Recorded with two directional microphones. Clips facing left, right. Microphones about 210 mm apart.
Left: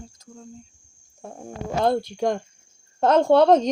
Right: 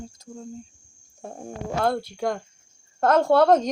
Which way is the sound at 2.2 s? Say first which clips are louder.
Left 3 dB; 20° left (ahead or behind).